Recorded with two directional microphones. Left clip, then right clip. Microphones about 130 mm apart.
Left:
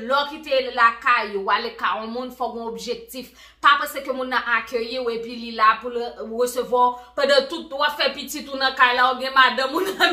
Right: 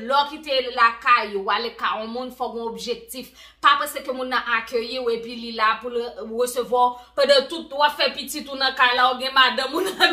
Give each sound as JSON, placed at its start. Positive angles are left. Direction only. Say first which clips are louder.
{"t": 0.0, "sound": "a woman's voice", "louder": "right 1 dB", "side_deg": -25}
{"t": 3.6, "sound": "a woman's voice", "louder": "left 1 dB", "side_deg": -25}